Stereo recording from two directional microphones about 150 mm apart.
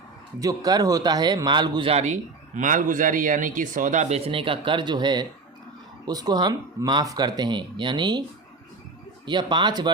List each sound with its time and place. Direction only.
0.3 s speech: 25° right (ahead or behind)
2.6 s speech: 60° right (ahead or behind)
4.3 s speech: 35° right (ahead or behind)
9.2 s speech: 30° right (ahead or behind)